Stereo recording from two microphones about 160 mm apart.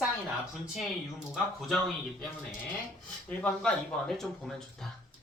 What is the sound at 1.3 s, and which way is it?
Speech, centre (ahead or behind).